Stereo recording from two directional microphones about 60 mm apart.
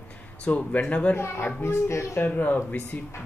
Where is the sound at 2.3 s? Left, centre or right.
Left.